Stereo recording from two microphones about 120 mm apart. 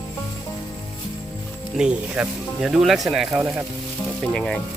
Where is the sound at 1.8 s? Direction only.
10° right (ahead or behind).